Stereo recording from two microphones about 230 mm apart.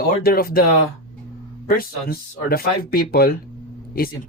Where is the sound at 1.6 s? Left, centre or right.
Left.